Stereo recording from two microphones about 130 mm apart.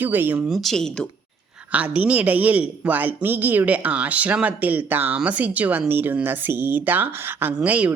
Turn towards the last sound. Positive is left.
turn(degrees=-10)  # may be behind; listen again after turning